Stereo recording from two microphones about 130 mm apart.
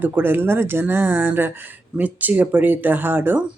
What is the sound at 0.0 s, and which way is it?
Speech, 15° right (ahead or behind).